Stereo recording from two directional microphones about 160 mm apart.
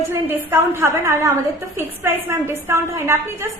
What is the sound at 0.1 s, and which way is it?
A woman's voice, 15° right (ahead or behind).